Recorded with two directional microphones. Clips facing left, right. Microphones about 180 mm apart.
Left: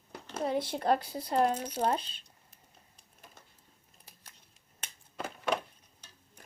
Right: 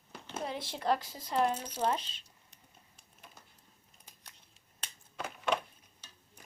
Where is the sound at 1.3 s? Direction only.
35° left (ahead or behind).